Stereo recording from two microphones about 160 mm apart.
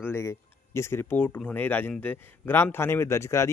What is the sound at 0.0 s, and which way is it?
A man's voice, 15° left (ahead or behind).